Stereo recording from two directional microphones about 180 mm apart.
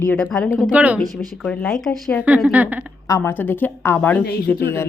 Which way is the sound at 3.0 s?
15° left (ahead or behind).